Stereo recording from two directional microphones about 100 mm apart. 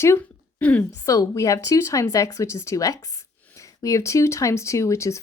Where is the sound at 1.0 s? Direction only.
35° left (ahead or behind).